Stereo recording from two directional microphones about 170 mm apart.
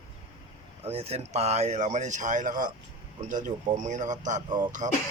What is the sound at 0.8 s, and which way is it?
Speech, 35° right (ahead or behind).